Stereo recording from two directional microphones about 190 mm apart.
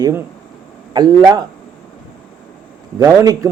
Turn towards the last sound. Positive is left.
turn(degrees=-20)  # may be behind; listen again after turning